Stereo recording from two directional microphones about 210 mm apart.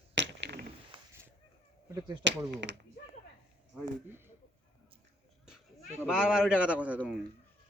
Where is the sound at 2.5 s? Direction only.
55° right (ahead or behind).